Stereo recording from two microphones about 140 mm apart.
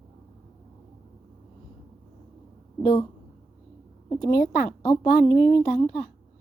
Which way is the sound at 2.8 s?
40° left (ahead or behind).